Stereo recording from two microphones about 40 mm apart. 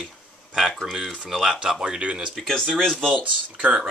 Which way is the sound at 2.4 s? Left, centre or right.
Centre.